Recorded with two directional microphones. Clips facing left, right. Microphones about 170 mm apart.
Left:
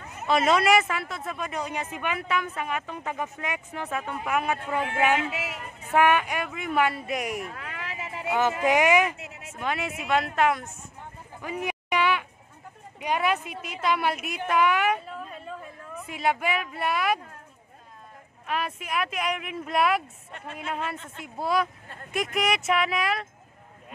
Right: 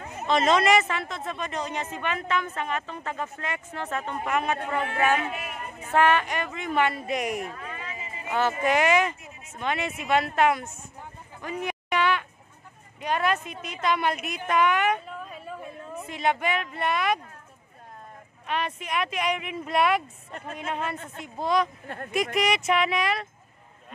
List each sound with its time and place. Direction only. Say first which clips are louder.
0.3 s speech: even; 5° left (ahead or behind)
5.3 s speech: left 1 dB; 90° left
5.9 s speech: even; 10° left (ahead or behind)
7.5 s a sound: left 1 dB; 80° left
8.3 s speech: left 1 dB; 15° left (ahead or behind)
9.1 s a sound: left 4 dB; 80° left
9.6 s speech: right 1 dB; 5° left (ahead or behind)
11.4 s a sound: even; 10° left (ahead or behind)
13.0 s a woman's voice: even; 10° left (ahead or behind); by 15.6 s 5° right (ahead or behind)
16.1 s speech: even; 5° left (ahead or behind)
18.5 s speech: right 1 dB; 5° left (ahead or behind)
21.8 s speech: right 8 dB; 65° right (ahead or behind)
22.1 s speech: right 1 dB; centre (ahead or behind)